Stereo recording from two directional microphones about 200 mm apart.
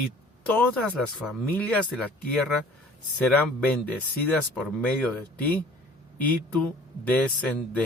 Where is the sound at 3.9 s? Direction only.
5° left (ahead or behind).